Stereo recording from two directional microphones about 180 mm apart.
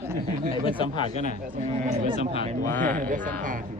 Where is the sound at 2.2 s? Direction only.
35° left (ahead or behind).